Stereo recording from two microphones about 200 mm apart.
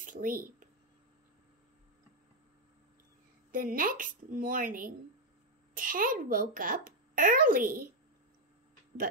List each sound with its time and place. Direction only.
0.0 s speech: 45° right (ahead or behind)
3.5 s a child's voice: 45° right (ahead or behind)